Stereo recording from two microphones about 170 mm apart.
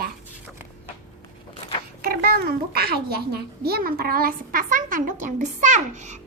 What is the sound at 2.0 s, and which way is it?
A child's voice, 65° right (ahead or behind).